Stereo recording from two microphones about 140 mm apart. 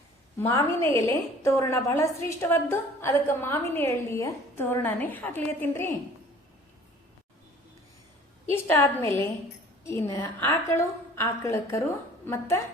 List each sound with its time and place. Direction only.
0.3 s a woman's voice: 20° left (ahead or behind)
8.5 s a woman's voice: 20° left (ahead or behind)